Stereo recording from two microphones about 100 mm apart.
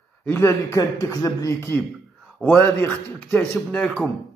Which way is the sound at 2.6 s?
15° left (ahead or behind).